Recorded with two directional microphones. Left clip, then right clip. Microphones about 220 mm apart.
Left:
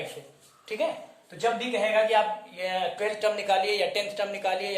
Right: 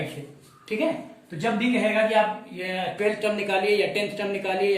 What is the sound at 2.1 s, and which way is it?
Speech, 25° left (ahead or behind).